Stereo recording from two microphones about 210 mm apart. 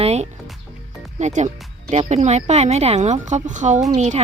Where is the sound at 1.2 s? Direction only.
35° right (ahead or behind).